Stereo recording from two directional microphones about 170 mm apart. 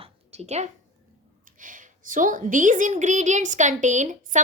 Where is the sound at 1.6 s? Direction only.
50° right (ahead or behind).